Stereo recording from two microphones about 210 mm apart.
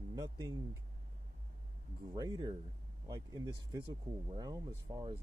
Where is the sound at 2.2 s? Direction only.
20° right (ahead or behind).